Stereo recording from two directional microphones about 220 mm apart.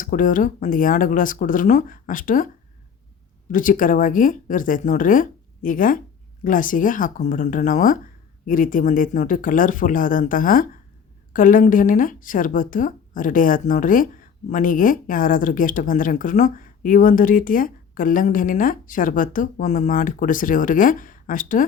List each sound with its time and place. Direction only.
0.0 s speech: 35° left (ahead or behind)
3.5 s speech: 35° left (ahead or behind)